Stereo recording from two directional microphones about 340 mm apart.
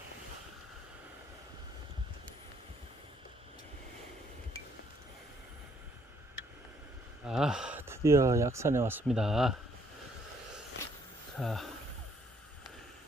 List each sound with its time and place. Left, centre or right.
7.3 s speech: centre
11.3 s speech: centre